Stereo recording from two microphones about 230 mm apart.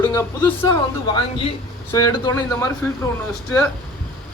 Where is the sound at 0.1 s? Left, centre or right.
Centre.